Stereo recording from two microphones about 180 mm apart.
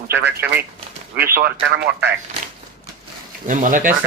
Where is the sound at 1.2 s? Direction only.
55° right (ahead or behind).